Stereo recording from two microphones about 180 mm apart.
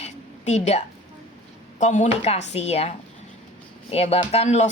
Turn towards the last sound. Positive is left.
turn(degrees=35)  # may be behind; listen again after turning